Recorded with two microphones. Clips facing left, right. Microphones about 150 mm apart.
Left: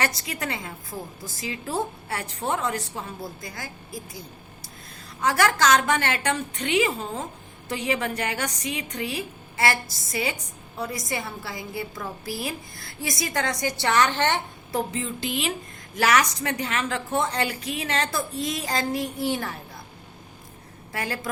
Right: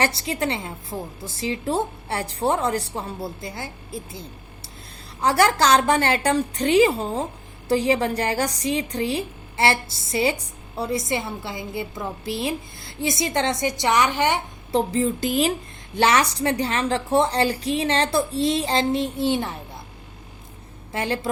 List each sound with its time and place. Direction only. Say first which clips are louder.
0.0 s a woman's voice: right 5 dB; 30° right (ahead or behind)
5.2 s a woman's voice: right 3 dB; 30° right (ahead or behind); by 14.4 s 10° right (ahead or behind)
14.7 s a woman's voice: right 7 dB; 30° right (ahead or behind)
16.0 s a woman's voice: right 3 dB; 30° right (ahead or behind)
20.9 s a woman's voice: right 5 dB; 25° right (ahead or behind)